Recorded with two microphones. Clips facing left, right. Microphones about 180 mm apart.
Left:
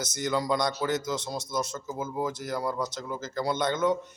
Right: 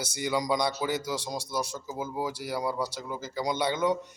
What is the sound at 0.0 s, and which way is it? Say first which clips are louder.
A man's voice: left 1 dB; 10° right (ahead or behind).